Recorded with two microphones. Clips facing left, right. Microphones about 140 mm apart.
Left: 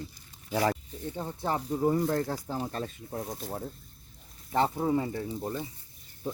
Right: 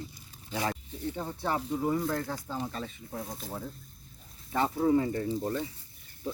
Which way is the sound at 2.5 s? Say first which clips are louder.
Left 2 dB; 55° left (ahead or behind).